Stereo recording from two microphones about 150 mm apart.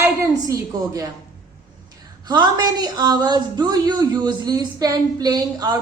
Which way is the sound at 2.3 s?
30° right (ahead or behind).